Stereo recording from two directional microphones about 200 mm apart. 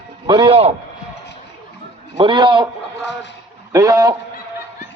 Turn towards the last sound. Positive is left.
turn(degrees=-15)  # may be behind; listen again after turning